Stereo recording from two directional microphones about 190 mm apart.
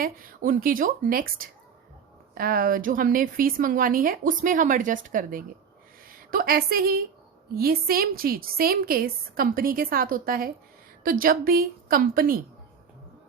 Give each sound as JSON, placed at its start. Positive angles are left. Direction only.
{"t": 0.0, "sound": "a woman's voice", "side_deg": -50}